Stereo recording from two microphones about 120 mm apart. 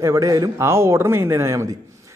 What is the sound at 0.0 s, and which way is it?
A man's voice, 25° right (ahead or behind).